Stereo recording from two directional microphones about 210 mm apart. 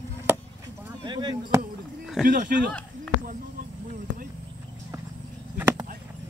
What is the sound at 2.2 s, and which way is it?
Speech, centre (ahead or behind).